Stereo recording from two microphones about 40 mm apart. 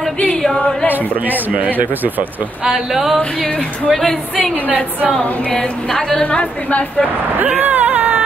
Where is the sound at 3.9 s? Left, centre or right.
Centre.